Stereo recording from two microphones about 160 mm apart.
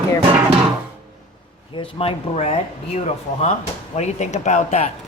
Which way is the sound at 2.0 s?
40° left (ahead or behind).